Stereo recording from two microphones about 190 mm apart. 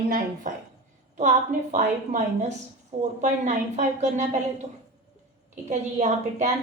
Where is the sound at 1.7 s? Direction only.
40° right (ahead or behind).